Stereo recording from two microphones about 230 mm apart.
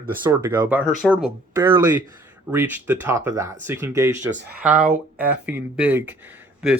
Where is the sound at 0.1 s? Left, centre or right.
Centre.